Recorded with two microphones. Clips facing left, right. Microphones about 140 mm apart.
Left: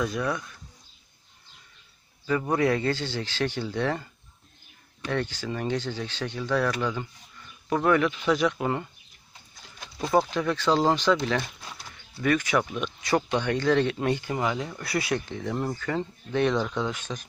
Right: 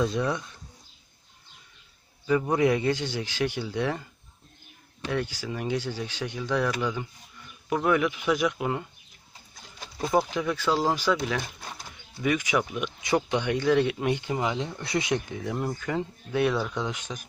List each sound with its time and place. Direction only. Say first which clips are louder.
0.0 s speech: right 2 dB; 25° right (ahead or behind)
2.5 s speech: left 1 dB; 15° right (ahead or behind)
5.1 s speech: left 1 dB; 10° right (ahead or behind)
10.0 s speech: left 1 dB; 10° right (ahead or behind)